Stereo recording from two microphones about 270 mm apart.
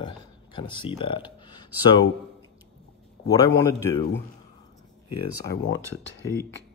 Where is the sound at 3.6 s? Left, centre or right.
Centre.